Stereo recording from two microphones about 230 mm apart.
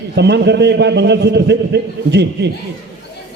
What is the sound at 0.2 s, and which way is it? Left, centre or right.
A man's voice, right.